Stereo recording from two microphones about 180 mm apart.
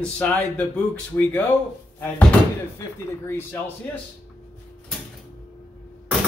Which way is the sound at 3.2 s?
10° left (ahead or behind).